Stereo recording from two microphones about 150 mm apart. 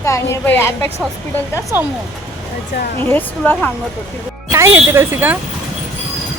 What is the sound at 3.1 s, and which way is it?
Speech, 10° left (ahead or behind).